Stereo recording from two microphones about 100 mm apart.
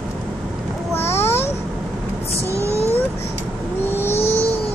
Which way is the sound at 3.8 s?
20° left (ahead or behind).